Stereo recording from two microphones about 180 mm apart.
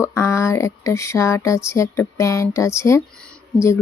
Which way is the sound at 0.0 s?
15° left (ahead or behind).